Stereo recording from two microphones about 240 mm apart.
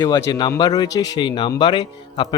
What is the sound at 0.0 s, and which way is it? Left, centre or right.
Speech, centre.